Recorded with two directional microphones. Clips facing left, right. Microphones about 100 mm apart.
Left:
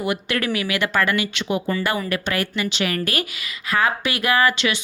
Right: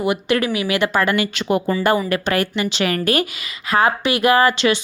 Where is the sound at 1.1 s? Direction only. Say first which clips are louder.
Right 4 dB; 45° right (ahead or behind).